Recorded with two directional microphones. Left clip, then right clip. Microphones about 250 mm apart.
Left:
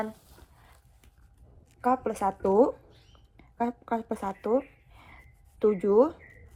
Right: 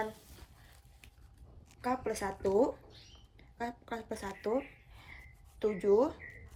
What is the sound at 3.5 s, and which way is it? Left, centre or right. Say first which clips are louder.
Speech: left 10 dB; centre.